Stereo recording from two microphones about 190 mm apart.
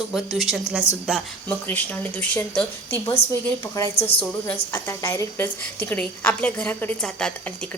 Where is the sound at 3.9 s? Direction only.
30° left (ahead or behind).